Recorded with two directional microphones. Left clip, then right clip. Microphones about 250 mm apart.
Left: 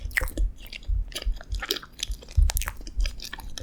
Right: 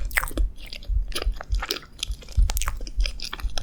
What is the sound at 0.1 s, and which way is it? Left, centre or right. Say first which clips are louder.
Chewing: right 2 dB; centre.